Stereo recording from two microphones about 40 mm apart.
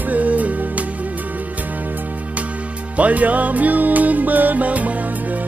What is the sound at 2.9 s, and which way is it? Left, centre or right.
Music, right.